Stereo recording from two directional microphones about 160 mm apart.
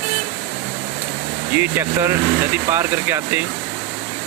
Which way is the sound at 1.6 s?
15° right (ahead or behind).